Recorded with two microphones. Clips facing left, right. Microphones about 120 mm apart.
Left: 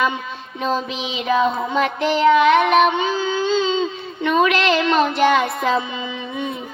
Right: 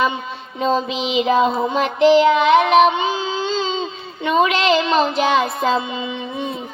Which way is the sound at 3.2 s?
30° right (ahead or behind).